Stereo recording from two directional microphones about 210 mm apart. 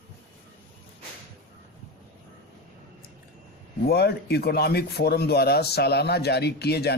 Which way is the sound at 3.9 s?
50° left (ahead or behind).